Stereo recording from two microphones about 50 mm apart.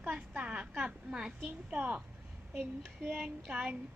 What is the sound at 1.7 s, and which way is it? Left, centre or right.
A woman's voice, right.